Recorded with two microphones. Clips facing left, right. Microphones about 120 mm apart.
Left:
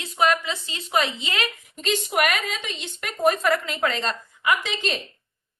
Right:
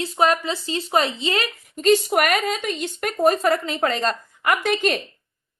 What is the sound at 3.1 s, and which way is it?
A woman's voice, 30° right (ahead or behind).